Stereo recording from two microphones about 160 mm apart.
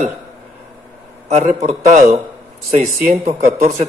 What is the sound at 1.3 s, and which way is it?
Speech, 45° right (ahead or behind).